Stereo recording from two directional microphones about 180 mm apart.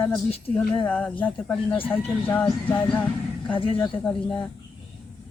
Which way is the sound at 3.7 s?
5° left (ahead or behind).